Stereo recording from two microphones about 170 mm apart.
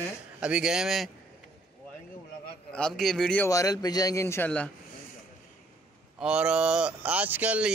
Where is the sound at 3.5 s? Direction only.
20° left (ahead or behind).